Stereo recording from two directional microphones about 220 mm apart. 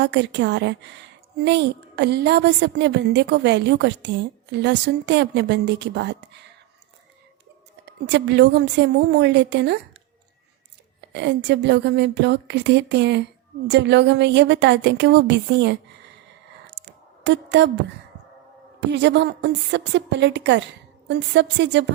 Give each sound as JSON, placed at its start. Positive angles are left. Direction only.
{"t": 0.0, "sound": "a woman's voice", "side_deg": -55}
{"t": 7.9, "sound": "a woman's voice", "side_deg": -50}
{"t": 11.1, "sound": "a woman's voice", "side_deg": -50}
{"t": 17.2, "sound": "a woman's voice", "side_deg": -55}
{"t": 18.9, "sound": "a woman's voice", "side_deg": -50}